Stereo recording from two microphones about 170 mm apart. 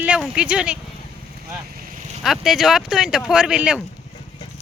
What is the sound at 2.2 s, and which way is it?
Speech, centre (ahead or behind).